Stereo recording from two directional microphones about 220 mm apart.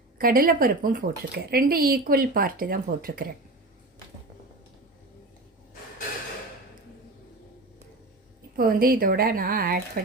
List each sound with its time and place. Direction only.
0.2 s speech: 40° right (ahead or behind)
8.5 s speech: 40° right (ahead or behind)